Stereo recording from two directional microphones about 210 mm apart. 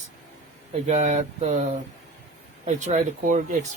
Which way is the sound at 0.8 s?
35° right (ahead or behind).